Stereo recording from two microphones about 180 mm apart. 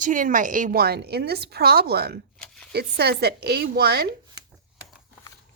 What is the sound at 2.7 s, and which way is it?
A woman's voice, 65° right (ahead or behind).